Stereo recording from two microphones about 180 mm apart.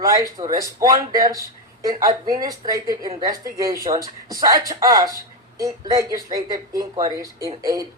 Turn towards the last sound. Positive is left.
turn(degrees=-20)  # may be behind; listen again after turning